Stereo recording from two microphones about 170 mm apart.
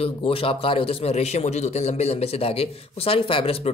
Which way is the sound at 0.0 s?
35° left (ahead or behind).